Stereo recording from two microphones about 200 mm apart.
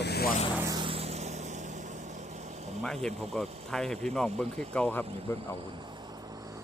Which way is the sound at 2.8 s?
5° left (ahead or behind).